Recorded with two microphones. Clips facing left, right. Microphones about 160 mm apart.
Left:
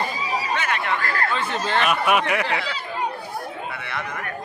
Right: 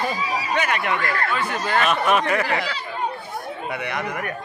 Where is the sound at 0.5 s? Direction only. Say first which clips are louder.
Right 4 dB; 15° right (ahead or behind).